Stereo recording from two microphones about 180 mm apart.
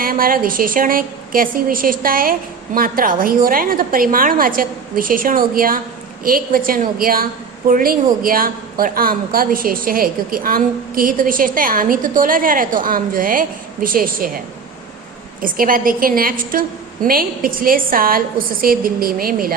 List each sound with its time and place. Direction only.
0.0 s a woman's voice: 50° right (ahead or behind)
15.4 s a woman's voice: 50° right (ahead or behind)